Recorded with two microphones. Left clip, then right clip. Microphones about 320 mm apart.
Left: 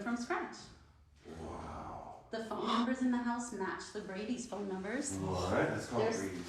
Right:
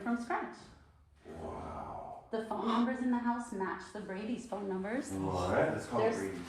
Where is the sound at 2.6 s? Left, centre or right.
Centre.